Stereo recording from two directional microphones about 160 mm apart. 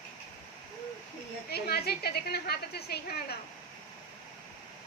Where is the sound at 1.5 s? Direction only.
80° left.